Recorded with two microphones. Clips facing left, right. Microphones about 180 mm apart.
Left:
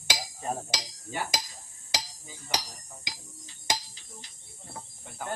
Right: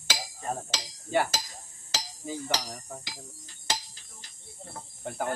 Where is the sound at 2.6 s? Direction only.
60° right (ahead or behind).